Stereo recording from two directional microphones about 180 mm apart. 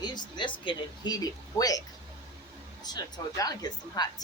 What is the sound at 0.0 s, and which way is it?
Speech, 25° left (ahead or behind).